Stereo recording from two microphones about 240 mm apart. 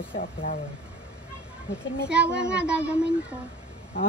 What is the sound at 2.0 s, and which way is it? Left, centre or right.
Child singing, centre.